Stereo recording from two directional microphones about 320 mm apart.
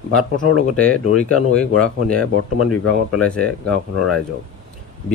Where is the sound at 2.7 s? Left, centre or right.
Left.